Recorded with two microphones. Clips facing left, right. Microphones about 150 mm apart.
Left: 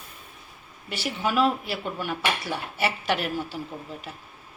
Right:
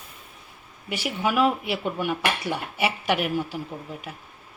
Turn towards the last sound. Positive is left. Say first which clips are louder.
# right 1 dB
turn(degrees=-15)  # may be behind; listen again after turning